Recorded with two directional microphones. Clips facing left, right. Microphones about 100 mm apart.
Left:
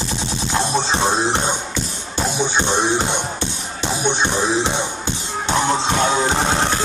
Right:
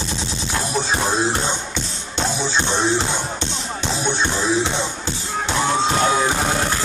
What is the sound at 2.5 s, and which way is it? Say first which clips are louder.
Music: left 1 dB; 20° left (ahead or behind).